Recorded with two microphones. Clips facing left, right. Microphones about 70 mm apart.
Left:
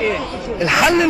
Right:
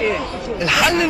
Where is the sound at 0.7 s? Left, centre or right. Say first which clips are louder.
Left 3 dB; centre.